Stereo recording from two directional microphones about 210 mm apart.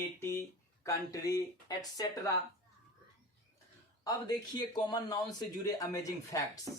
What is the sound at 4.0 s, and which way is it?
Speech, 20° left (ahead or behind).